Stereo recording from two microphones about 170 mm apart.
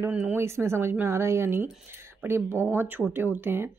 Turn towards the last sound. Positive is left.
turn(degrees=-15)  # may be behind; listen again after turning